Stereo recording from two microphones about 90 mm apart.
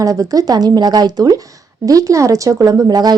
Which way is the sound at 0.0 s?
40° right (ahead or behind).